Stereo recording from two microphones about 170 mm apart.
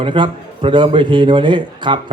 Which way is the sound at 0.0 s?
30° right (ahead or behind).